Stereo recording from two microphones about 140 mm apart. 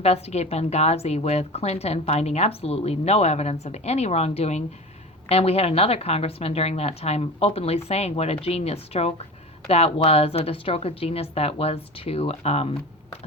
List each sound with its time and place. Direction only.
0.0 s a woman's voice: 50° left (ahead or behind)